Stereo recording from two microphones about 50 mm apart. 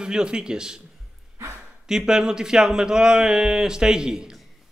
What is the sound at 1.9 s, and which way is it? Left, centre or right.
A man's voice, centre.